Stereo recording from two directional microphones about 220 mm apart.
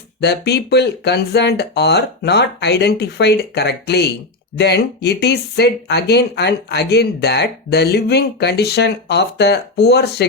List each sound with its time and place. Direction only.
0.2 s speech: 50° left (ahead or behind)